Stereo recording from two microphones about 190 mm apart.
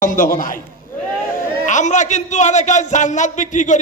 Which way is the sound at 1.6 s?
40° left (ahead or behind).